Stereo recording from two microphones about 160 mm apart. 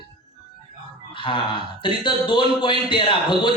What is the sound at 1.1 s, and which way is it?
Speech, 30° left (ahead or behind).